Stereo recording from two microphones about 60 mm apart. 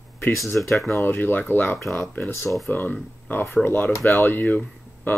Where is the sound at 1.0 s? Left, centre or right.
Left.